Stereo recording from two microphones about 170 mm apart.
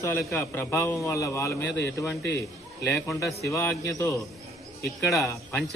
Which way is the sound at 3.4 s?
15° left (ahead or behind).